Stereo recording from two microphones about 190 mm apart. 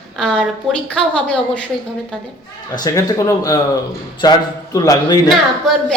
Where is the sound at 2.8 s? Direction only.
20° left (ahead or behind).